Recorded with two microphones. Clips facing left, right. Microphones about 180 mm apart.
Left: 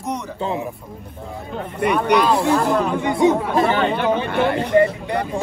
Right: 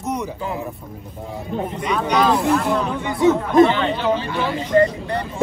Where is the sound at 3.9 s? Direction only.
60° left (ahead or behind).